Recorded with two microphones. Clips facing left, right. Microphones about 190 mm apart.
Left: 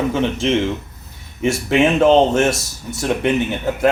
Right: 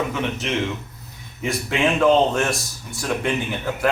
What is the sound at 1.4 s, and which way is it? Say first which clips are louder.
Speech: left 6 dB; 25° left (ahead or behind).